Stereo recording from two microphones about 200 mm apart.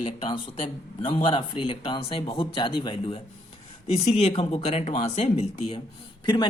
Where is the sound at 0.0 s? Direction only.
25° left (ahead or behind).